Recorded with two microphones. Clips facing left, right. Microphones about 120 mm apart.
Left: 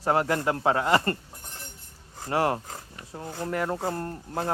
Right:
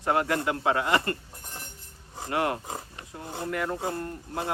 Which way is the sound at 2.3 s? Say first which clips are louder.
Left 2 dB; 35° left (ahead or behind).